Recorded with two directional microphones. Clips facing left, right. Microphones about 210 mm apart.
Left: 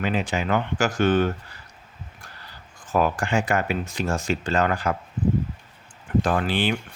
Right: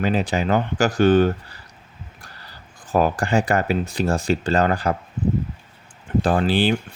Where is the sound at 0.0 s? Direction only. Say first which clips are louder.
Right 4 dB; 35° right (ahead or behind).